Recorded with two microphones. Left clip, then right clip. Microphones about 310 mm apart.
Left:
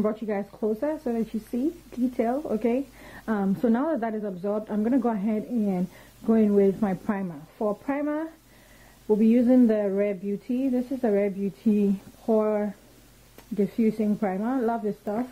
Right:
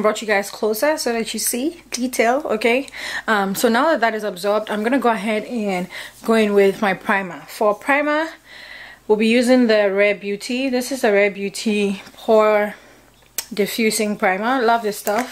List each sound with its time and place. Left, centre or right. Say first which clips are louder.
0.0 s speech: right 10 dB; centre
0.5 s speech: right 8 dB; centre
0.8 s speech: right 9 dB; centre
11.3 s speech: right 6 dB; right
12.4 s speech: right 11 dB; centre